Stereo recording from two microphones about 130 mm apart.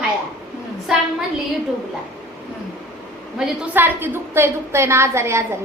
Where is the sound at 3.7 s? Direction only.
15° right (ahead or behind).